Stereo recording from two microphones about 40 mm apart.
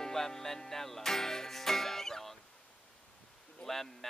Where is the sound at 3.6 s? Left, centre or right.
Centre.